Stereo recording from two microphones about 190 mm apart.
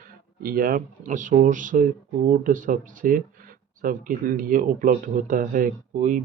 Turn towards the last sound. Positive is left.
turn(degrees=-45)  # may be behind; listen again after turning